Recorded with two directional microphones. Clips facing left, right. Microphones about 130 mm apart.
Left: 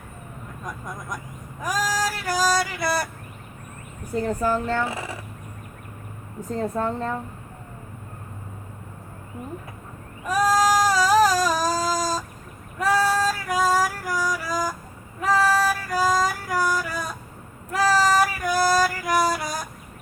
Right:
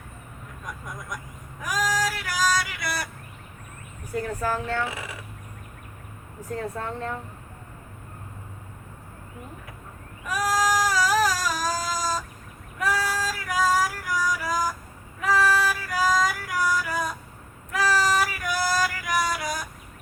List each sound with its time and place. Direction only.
1.6 s female singing: 35° left (ahead or behind)
4.1 s speech: 25° left (ahead or behind)
4.7 s a woman's voice: 35° left (ahead or behind)
6.5 s a woman's voice: 30° left (ahead or behind)
10.2 s a sound: 30° left (ahead or behind)
12.8 s female singing: 30° left (ahead or behind)